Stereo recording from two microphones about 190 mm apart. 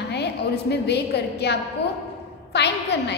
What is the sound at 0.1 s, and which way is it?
A woman's voice, 60° left (ahead or behind).